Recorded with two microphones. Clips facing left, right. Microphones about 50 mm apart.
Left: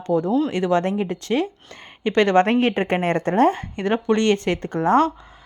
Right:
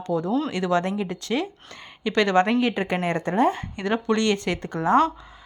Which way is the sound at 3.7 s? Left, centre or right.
Left.